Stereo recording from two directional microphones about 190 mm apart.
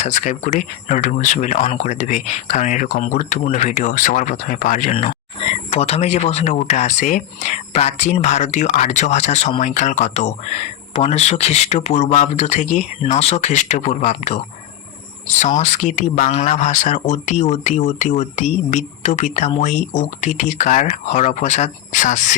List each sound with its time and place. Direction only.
0.0 s speech: 35° left (ahead or behind)